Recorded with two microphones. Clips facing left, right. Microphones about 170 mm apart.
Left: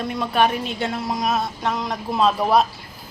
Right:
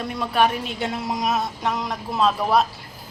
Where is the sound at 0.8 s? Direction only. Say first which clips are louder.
Even; 15° right (ahead or behind).